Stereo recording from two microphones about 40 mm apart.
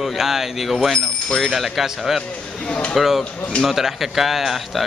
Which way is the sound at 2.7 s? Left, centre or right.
Left.